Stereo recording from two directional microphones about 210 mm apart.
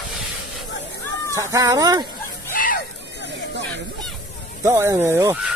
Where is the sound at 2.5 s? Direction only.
40° left (ahead or behind).